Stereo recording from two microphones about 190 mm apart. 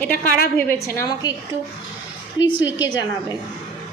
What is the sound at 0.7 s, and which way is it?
Speech, 15° left (ahead or behind).